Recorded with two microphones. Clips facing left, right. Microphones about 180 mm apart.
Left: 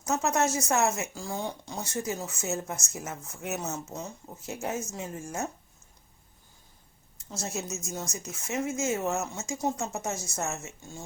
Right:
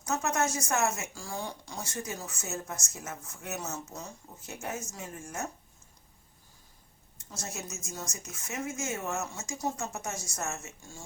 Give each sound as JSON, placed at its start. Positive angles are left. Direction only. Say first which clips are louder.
{"t": 0.0, "sound": "a woman's voice", "louder": "left 3 dB", "side_deg": 25}
{"t": 7.3, "sound": "a woman's voice", "louder": "left 6 dB", "side_deg": 25}